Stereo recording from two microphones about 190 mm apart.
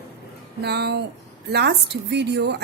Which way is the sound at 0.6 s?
60° right (ahead or behind).